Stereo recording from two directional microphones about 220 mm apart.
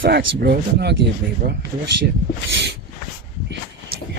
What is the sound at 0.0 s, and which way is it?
Speech, 45° right (ahead or behind).